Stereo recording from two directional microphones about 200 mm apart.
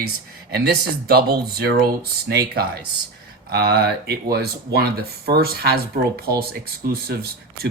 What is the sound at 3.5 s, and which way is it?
Speech, 50° right (ahead or behind).